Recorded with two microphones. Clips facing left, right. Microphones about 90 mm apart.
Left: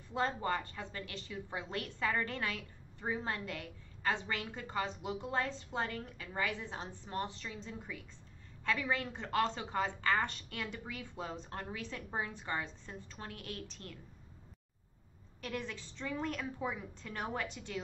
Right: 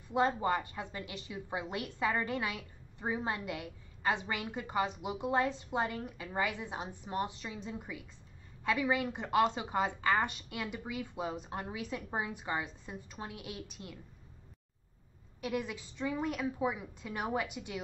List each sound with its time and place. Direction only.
0.1 s a woman's voice: 15° right (ahead or behind)
15.4 s a woman's voice: 10° right (ahead or behind)